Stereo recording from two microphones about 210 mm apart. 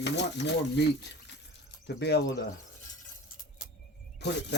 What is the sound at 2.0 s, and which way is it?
Speech, 50° left (ahead or behind).